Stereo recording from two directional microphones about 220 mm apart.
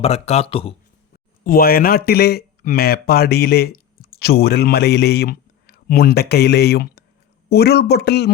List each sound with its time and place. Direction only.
0.0 s speech: 30° left (ahead or behind)
1.5 s speech: 40° left (ahead or behind)